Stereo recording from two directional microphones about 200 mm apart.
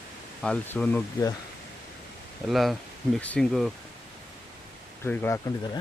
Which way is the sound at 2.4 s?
Centre (ahead or behind).